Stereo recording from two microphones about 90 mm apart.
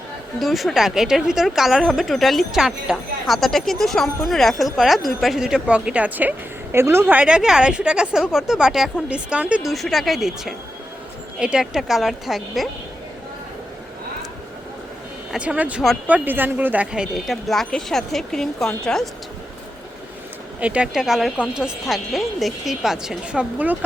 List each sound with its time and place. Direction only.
0.3 s speech: centre (ahead or behind)
9.6 s speech: centre (ahead or behind)
15.3 s speech: 15° right (ahead or behind)
17.2 s speech: 5° left (ahead or behind)
20.6 s speech: 15° right (ahead or behind)